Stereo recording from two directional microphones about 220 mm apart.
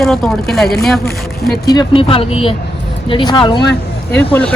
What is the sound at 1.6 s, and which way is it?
Speech, 15° left (ahead or behind).